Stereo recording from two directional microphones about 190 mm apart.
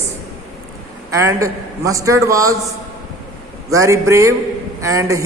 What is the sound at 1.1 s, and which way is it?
A man's voice, 15° right (ahead or behind).